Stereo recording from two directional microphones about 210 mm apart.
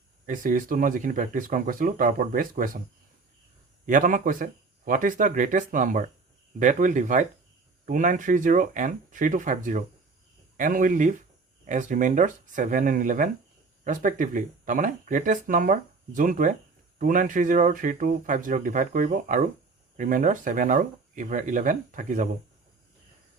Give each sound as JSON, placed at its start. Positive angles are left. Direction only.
{"t": 0.3, "sound": "speech", "side_deg": -40}
{"t": 3.8, "sound": "speech", "side_deg": -40}